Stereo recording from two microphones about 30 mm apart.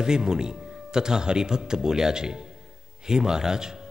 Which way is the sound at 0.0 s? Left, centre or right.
Right.